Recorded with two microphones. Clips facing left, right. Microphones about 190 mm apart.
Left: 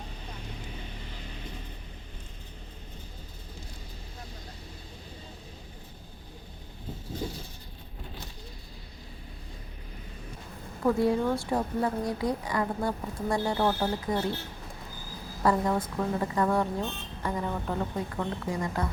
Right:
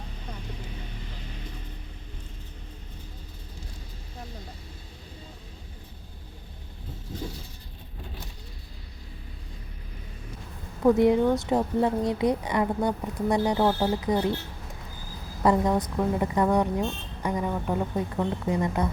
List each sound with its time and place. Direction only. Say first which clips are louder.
10.8 s a woman's voice: right 5 dB; 20° right (ahead or behind)
15.4 s a woman's voice: right 3 dB; 20° right (ahead or behind)